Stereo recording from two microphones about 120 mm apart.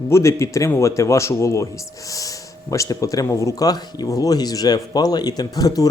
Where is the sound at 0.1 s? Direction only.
25° left (ahead or behind).